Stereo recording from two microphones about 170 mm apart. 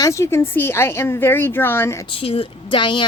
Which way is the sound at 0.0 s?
15° left (ahead or behind).